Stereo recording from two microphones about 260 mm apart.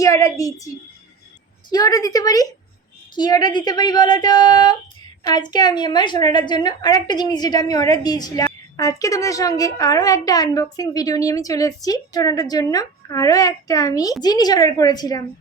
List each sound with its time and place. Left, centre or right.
0.0 s a woman's voice: centre
1.7 s a woman's voice: centre